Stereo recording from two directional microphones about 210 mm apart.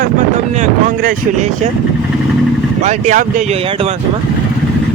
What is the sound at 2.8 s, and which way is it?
Speech, 35° right (ahead or behind).